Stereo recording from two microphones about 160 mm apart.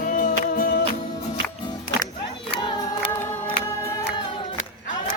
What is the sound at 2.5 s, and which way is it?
Choir, 35° left (ahead or behind).